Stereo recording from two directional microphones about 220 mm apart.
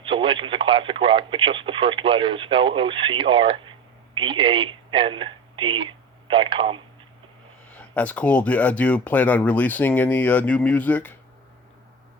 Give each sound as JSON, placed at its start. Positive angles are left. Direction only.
{"t": 0.0, "sound": "speech", "side_deg": -25}
{"t": 7.8, "sound": "speech", "side_deg": 5}